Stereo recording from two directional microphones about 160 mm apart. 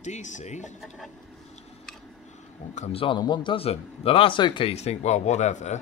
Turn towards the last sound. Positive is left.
turn(degrees=45)  # may be behind; listen again after turning